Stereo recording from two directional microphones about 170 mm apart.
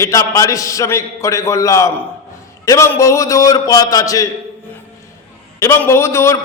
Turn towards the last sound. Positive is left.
turn(degrees=15)  # may be behind; listen again after turning